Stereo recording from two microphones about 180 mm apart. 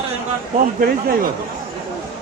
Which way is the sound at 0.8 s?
55° right (ahead or behind).